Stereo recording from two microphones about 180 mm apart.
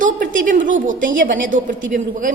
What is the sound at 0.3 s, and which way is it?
A woman's voice, 45° right (ahead or behind).